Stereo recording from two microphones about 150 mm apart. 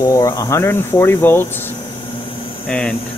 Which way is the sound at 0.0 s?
20° left (ahead or behind).